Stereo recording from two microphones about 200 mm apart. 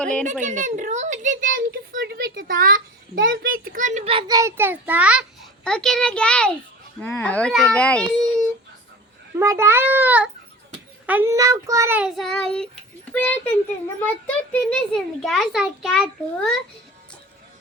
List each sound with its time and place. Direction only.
0.0 s a child's voice: 5° left (ahead or behind)
0.4 s a child's voice: 40° right (ahead or behind); by 8.0 s 5° left (ahead or behind)
9.4 s a child's voice: 15° right (ahead or behind)